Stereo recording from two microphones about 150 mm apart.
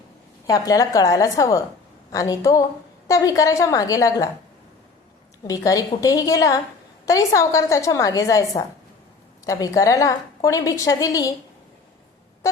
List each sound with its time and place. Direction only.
0.4 s a woman's voice: 25° left (ahead or behind)
5.5 s a woman's voice: 25° left (ahead or behind)